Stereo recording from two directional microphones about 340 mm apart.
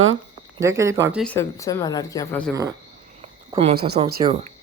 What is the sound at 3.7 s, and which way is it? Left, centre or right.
Speech, right.